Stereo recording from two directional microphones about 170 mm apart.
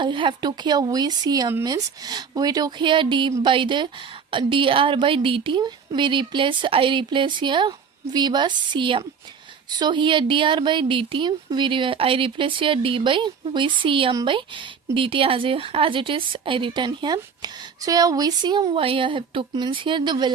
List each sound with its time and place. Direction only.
0.0 s speech: 30° right (ahead or behind)